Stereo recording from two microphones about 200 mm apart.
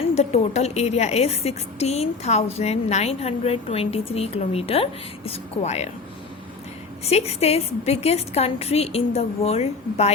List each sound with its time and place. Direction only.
0.0 s a woman's voice: 35° left (ahead or behind)
7.0 s a woman's voice: 30° left (ahead or behind)